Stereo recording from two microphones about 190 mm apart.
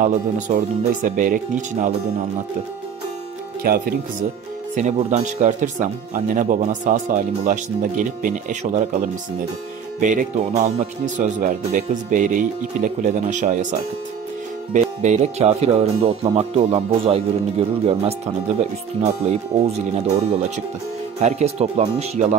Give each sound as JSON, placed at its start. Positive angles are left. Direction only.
{"t": 0.0, "sound": "speech", "side_deg": -40}
{"t": 3.6, "sound": "speech", "side_deg": -50}
{"t": 4.7, "sound": "speech", "side_deg": -40}
{"t": 9.9, "sound": "speech", "side_deg": -40}